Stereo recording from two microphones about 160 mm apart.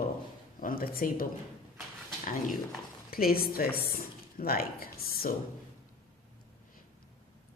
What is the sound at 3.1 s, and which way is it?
Speech, 70° left (ahead or behind).